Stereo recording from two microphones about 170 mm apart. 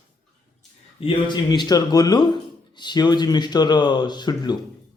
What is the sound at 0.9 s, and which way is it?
Speech, 30° left (ahead or behind).